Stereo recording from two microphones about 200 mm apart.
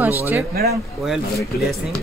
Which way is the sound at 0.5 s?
50° right (ahead or behind).